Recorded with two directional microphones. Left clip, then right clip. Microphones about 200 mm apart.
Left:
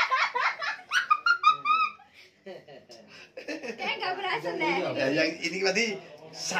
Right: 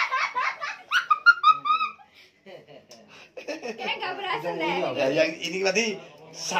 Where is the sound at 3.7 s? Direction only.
5° left (ahead or behind).